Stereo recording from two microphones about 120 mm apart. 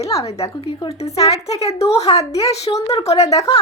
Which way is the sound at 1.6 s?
60° left (ahead or behind).